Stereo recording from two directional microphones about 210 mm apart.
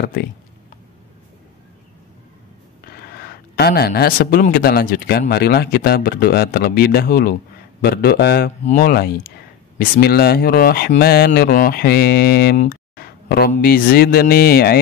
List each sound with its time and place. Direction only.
0.0 s speech: 50° left (ahead or behind)
2.9 s speech: 45° left (ahead or behind)
12.5 s a sound: 45° left (ahead or behind)
13.5 s speech: 45° left (ahead or behind)